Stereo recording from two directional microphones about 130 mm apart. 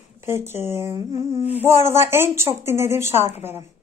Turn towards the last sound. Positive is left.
turn(degrees=-15)  # may be behind; listen again after turning